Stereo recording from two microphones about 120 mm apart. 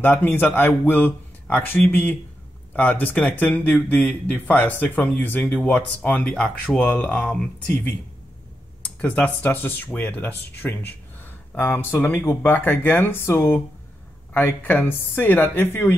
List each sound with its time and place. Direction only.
0.0 s speech: 15° left (ahead or behind)
9.0 s speech: 15° left (ahead or behind)